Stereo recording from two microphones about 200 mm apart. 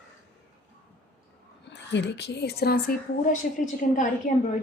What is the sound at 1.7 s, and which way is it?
A woman's voice, 60° left (ahead or behind).